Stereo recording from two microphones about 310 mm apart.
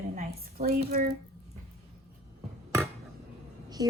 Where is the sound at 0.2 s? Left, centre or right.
Right.